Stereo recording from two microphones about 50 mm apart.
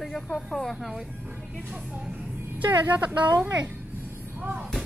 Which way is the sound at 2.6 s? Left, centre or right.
Right.